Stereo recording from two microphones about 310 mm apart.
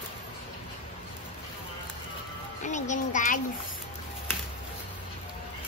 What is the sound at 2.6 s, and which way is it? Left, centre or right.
Music, left.